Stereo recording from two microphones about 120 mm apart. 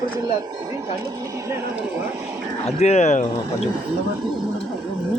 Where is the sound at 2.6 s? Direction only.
70° left (ahead or behind); by 3.2 s 85° left.